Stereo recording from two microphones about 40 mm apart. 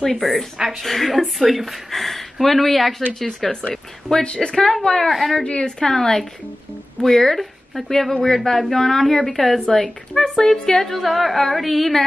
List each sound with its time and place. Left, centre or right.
0.0 s speech: centre
4.2 s speech: left
5.0 s speech: centre
5.4 s speech: left
5.9 s speech: centre
11.0 s speech: centre